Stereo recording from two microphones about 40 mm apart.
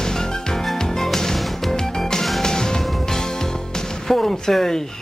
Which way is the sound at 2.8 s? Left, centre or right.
Centre.